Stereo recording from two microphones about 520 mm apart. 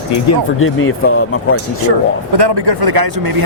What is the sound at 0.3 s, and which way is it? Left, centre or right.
Speech, left.